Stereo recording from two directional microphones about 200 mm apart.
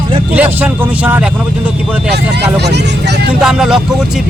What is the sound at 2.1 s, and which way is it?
Speech, 55° right (ahead or behind).